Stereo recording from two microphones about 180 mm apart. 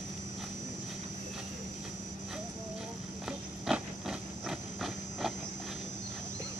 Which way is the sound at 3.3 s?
5° right (ahead or behind).